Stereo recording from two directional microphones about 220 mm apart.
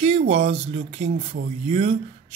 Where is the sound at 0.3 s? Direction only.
25° right (ahead or behind).